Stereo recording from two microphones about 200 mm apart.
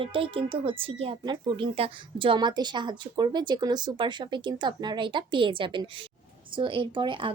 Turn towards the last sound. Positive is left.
turn(degrees=-25)  # may be behind; listen again after turning